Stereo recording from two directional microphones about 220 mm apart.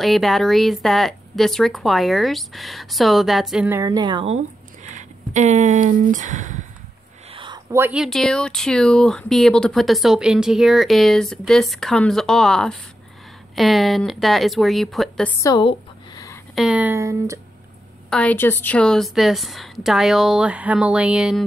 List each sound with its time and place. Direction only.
0.0 s speech: centre (ahead or behind); by 4.4 s 25° right (ahead or behind)
4.8 s speech: 35° right (ahead or behind)
7.2 s speech: 20° right (ahead or behind); by 15.3 s centre (ahead or behind)
15.4 s speech: 20° left (ahead or behind)
16.5 s speech: 5° right (ahead or behind)
18.1 s speech: 5° left (ahead or behind)